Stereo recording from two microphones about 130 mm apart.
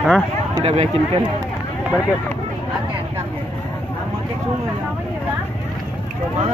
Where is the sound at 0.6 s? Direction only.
55° right (ahead or behind).